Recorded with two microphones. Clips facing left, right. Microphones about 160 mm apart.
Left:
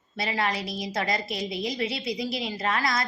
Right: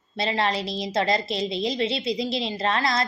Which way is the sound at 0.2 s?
25° right (ahead or behind).